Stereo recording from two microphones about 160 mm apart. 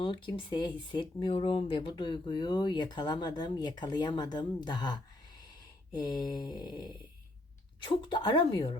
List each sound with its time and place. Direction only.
0.0 s speech: 30° left (ahead or behind)